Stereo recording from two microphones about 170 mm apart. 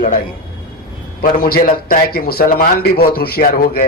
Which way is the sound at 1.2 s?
60° left (ahead or behind).